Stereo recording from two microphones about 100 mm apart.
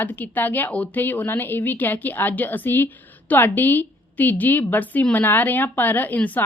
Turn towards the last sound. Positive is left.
turn(degrees=15)  # may be behind; listen again after turning